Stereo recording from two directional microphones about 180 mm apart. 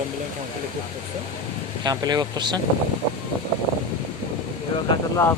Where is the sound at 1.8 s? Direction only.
20° right (ahead or behind).